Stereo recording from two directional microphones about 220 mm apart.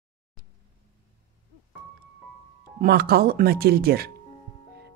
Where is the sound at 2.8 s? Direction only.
45° right (ahead or behind).